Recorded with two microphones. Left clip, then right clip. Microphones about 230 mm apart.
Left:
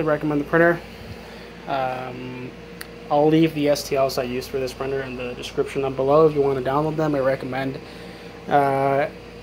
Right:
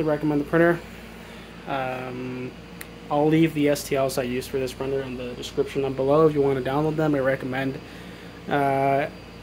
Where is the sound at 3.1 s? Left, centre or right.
Centre.